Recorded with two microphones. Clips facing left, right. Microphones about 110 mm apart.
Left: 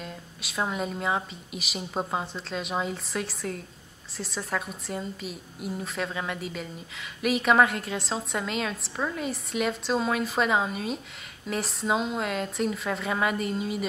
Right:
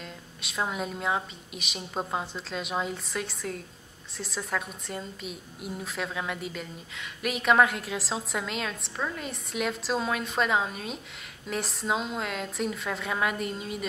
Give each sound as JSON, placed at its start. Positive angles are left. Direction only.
{"t": 0.0, "sound": "a woman's voice", "side_deg": 0}